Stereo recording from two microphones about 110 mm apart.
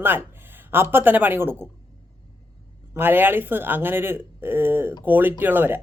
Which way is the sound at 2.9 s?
20° right (ahead or behind).